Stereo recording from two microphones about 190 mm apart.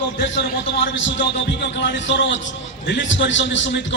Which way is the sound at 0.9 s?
75° left (ahead or behind).